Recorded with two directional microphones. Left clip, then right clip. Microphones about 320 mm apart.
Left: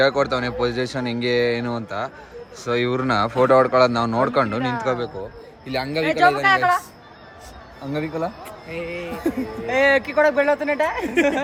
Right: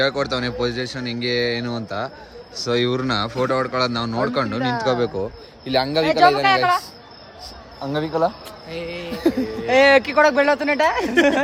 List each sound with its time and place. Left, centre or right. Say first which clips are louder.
0.0 s speech: left 2 dB; centre
4.6 s a man's voice: right 2 dB; right
4.9 s speech: right 4 dB; centre
7.9 s a man's voice: right 5 dB; centre